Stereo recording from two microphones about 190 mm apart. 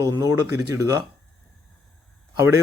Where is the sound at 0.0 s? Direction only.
15° right (ahead or behind).